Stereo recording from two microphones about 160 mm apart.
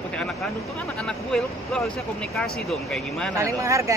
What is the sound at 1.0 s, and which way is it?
Speech, 5° left (ahead or behind).